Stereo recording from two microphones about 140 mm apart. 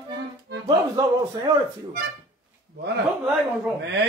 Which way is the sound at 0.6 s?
30° right (ahead or behind).